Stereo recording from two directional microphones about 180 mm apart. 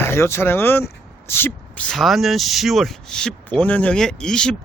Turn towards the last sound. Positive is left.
turn(degrees=5)  # may be behind; listen again after turning